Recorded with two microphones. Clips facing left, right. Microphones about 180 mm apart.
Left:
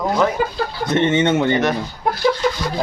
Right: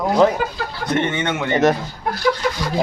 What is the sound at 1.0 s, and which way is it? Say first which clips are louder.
Speech: left 7 dB; 25° left (ahead or behind).